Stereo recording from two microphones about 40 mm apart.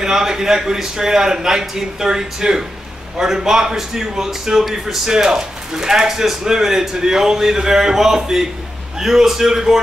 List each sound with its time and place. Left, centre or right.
0.0 s speech: centre
5.1 s speech: centre